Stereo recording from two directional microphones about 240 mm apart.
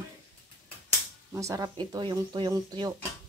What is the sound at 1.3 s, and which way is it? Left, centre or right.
Speech, centre.